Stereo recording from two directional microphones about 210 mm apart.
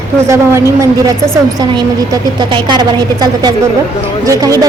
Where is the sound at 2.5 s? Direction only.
20° right (ahead or behind).